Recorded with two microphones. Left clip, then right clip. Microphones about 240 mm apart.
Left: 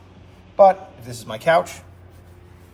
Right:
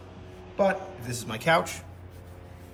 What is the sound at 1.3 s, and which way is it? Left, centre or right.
Speech, centre.